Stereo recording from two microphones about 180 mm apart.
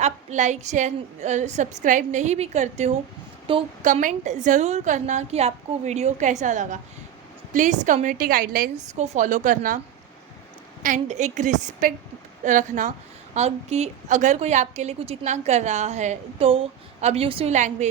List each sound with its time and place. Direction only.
0.0 s a woman's voice: 40° right (ahead or behind)
3.5 s a woman's voice: 30° right (ahead or behind)
3.8 s a woman's voice: 45° right (ahead or behind)
10.8 s a woman's voice: 40° right (ahead or behind)